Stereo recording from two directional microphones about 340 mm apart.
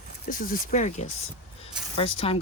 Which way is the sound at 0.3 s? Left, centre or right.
Left.